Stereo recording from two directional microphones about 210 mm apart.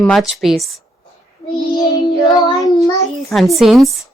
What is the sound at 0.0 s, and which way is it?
Speech, centre (ahead or behind).